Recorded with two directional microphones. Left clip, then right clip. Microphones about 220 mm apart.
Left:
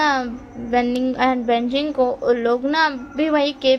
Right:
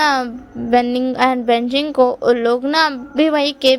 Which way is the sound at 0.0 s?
45° right (ahead or behind).